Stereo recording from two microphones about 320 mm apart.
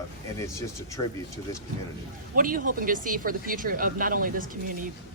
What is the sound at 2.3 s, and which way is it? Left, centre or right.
Speech, right.